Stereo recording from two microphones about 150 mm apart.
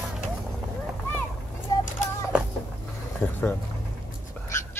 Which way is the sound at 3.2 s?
5° left (ahead or behind).